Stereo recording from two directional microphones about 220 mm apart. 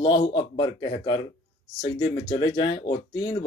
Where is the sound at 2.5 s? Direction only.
25° left (ahead or behind).